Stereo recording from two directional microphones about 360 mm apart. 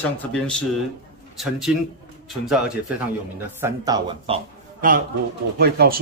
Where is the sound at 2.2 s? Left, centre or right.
Centre.